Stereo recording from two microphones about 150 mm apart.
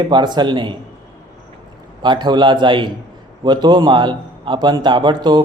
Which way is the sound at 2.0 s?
30° right (ahead or behind).